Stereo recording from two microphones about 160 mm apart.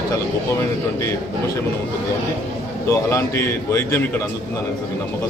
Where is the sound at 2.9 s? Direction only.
15° left (ahead or behind).